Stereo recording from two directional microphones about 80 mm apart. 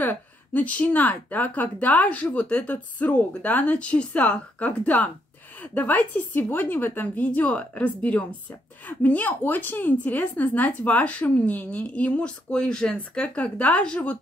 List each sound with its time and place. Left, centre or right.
0.0 s a woman's voice: left